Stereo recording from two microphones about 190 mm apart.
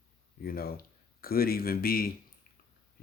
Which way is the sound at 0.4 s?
50° left (ahead or behind).